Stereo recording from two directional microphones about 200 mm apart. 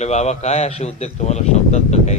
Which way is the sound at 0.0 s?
35° left (ahead or behind).